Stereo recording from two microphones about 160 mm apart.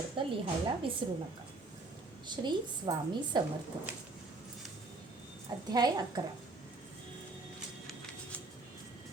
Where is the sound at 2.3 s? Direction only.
30° right (ahead or behind).